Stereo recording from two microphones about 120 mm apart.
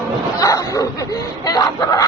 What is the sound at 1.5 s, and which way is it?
Speech, 30° left (ahead or behind).